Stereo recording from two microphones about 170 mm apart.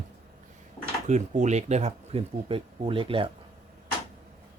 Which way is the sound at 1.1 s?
45° right (ahead or behind).